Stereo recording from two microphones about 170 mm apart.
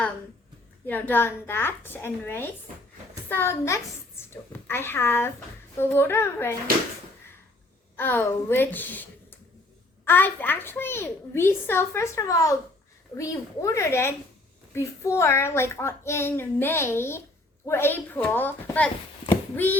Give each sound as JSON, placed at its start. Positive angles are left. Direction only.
{"t": 0.9, "sound": "a child's voice", "side_deg": 10}
{"t": 7.9, "sound": "a child's voice", "side_deg": 10}
{"t": 10.1, "sound": "a child's voice", "side_deg": 10}